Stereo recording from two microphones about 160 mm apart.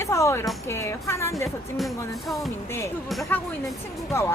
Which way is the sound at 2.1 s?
Centre (ahead or behind).